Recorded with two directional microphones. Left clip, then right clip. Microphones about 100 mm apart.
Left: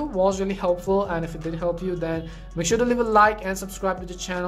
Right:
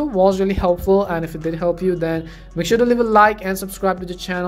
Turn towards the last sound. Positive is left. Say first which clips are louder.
# right 6 dB
turn(degrees=-20)  # may be behind; listen again after turning